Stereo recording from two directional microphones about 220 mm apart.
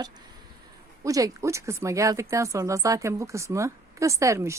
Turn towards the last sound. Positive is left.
turn(degrees=-15)  # may be behind; listen again after turning